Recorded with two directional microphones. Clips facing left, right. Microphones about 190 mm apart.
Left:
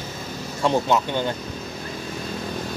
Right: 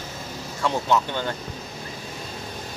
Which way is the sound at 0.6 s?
20° left (ahead or behind).